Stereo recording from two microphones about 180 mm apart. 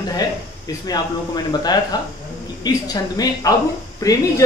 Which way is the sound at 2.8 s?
20° left (ahead or behind).